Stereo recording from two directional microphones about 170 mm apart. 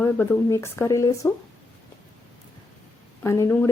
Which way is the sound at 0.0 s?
15° left (ahead or behind).